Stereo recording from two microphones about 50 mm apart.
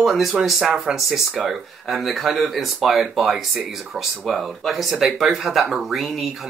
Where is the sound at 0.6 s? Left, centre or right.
Centre.